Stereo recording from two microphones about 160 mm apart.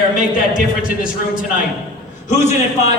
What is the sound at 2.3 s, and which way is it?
Speech, 45° left (ahead or behind).